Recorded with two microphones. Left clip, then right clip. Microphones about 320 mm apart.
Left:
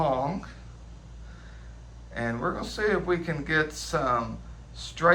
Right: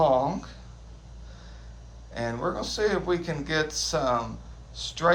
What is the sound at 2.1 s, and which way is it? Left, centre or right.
A man's voice, centre.